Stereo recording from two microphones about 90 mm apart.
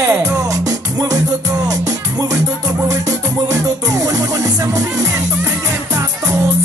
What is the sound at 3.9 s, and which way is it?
Music, 40° right (ahead or behind).